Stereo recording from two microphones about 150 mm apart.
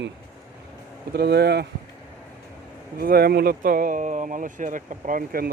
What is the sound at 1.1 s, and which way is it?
Speech, 90° right.